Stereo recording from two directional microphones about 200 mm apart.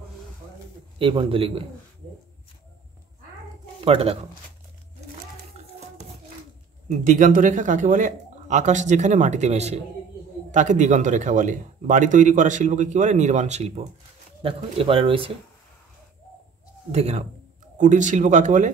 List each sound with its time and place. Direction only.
0.9 s speech: 25° right (ahead or behind)
3.8 s speech: 30° right (ahead or behind)
6.9 s speech: 40° right (ahead or behind)
16.9 s speech: 35° right (ahead or behind)